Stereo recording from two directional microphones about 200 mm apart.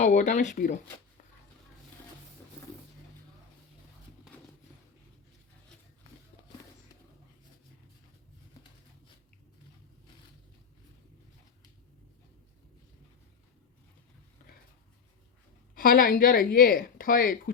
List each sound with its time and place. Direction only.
0.0 s speech: 40° left (ahead or behind)
15.7 s speech: 45° left (ahead or behind)